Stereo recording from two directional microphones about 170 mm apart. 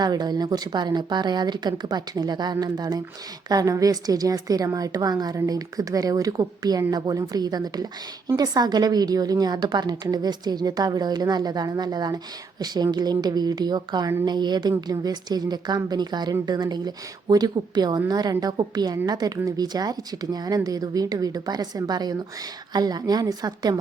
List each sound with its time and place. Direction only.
0.0 s a woman's voice: 25° right (ahead or behind)